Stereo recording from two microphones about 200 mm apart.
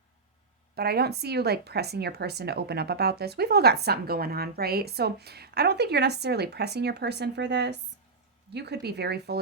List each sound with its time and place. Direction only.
0.8 s speech: 50° right (ahead or behind)